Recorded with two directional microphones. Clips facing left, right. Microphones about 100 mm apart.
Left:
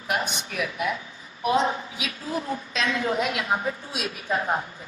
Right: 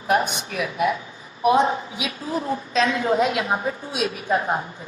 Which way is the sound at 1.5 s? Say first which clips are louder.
Right 5 dB; 25° right (ahead or behind).